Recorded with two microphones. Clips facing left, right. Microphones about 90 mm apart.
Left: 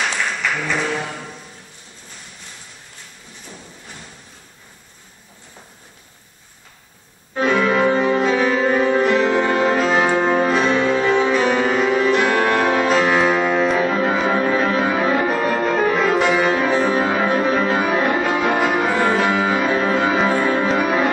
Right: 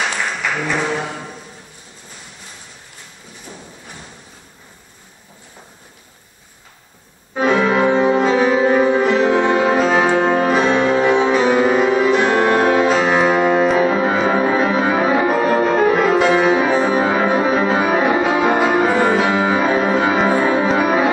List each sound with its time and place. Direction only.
0.0 s a sound: 10° right (ahead or behind)
7.3 s music: 5° right (ahead or behind)
8.7 s music: 5° right (ahead or behind)